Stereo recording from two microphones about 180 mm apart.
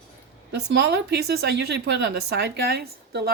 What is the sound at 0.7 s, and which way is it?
Speech, 65° right (ahead or behind).